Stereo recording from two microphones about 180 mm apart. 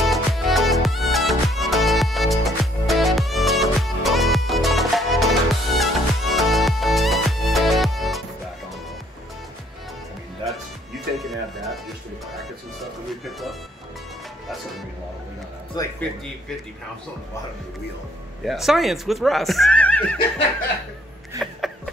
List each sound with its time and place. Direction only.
0.0 s music: centre (ahead or behind)
11.1 s music: centre (ahead or behind)
13.2 s music: centre (ahead or behind)
15.8 s music: 20° left (ahead or behind)
18.4 s speech: centre (ahead or behind)
21.4 s a sound: centre (ahead or behind)